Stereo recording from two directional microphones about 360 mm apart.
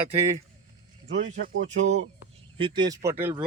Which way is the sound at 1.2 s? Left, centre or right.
Right.